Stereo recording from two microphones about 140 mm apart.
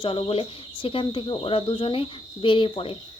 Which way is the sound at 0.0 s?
35° left (ahead or behind).